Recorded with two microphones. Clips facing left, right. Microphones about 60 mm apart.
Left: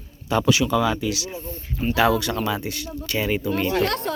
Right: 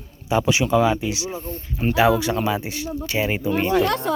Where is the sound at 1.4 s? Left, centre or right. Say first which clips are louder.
Right 1 dB; right.